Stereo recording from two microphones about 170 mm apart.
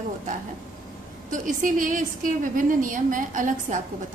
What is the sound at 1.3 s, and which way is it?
A woman's voice, 50° right (ahead or behind).